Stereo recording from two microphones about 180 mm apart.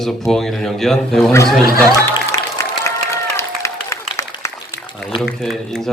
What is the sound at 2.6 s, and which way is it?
Applause, 15° left (ahead or behind).